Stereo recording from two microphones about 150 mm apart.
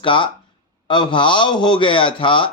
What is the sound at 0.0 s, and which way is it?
A man's voice, 35° left (ahead or behind).